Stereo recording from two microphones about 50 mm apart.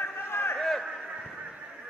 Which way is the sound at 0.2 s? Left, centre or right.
Left.